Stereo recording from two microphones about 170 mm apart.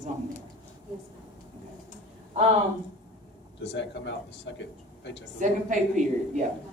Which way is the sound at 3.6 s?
90° left.